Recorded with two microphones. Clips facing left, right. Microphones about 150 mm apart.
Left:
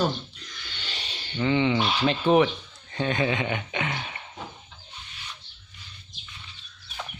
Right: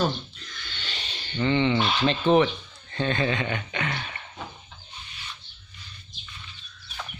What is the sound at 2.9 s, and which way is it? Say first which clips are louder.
Speech: even; 10° left (ahead or behind).